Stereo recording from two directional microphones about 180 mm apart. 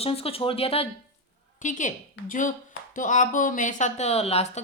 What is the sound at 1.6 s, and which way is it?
Speech, 45° left (ahead or behind).